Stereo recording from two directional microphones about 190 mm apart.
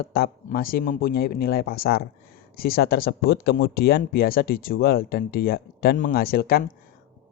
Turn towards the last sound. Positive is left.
turn(degrees=55)  # may be behind; listen again after turning